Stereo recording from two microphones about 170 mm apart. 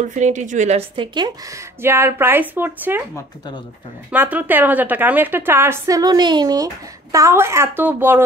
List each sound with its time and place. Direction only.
0.1 s a woman's voice: 45° right (ahead or behind); by 3.0 s 10° right (ahead or behind)
4.1 s a woman's voice: 10° right (ahead or behind)